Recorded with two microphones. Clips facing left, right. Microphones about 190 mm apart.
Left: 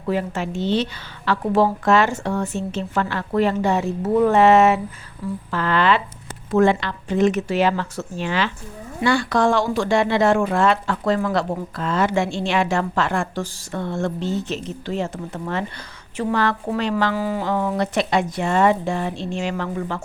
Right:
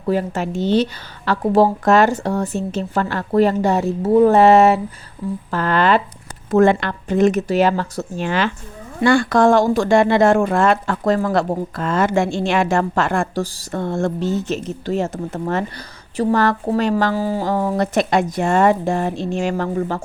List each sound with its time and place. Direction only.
0.0 s a woman's voice: 40° right (ahead or behind)
4.0 s a woman's voice: 30° right (ahead or behind)